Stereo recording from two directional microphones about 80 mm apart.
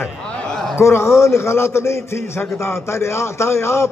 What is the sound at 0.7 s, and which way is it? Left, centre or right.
A man's voice, left.